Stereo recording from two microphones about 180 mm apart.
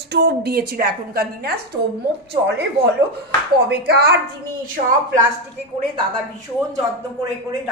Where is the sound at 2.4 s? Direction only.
75° right (ahead or behind).